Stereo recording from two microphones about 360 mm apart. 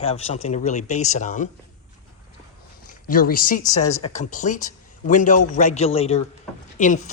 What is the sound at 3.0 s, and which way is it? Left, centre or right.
A man's voice, left.